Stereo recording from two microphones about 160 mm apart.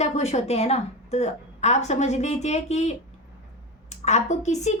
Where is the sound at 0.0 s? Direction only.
40° left (ahead or behind).